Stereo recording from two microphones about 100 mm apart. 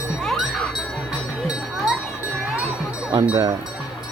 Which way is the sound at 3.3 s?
35° right (ahead or behind).